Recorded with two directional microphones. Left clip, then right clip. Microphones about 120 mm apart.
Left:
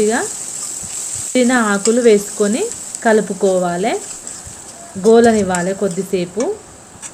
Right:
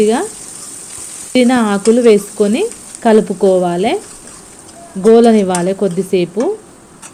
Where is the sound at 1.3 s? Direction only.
30° right (ahead or behind).